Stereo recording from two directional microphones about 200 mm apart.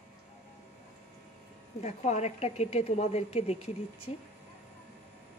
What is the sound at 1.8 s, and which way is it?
A woman's voice, 35° left (ahead or behind).